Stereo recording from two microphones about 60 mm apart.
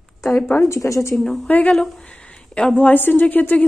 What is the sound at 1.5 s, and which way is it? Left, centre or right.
Speech, left.